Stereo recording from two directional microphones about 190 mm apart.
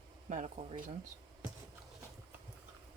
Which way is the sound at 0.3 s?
40° right (ahead or behind).